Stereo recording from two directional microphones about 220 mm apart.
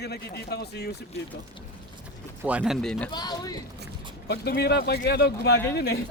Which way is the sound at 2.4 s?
5° right (ahead or behind).